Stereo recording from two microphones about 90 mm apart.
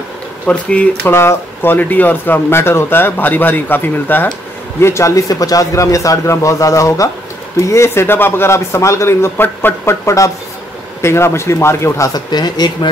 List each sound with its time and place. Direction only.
0.5 s speech: 15° left (ahead or behind)
1.1 s speech: 25° left (ahead or behind)
12.1 s speech: 50° left (ahead or behind)